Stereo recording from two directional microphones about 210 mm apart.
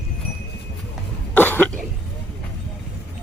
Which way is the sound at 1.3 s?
10° left (ahead or behind).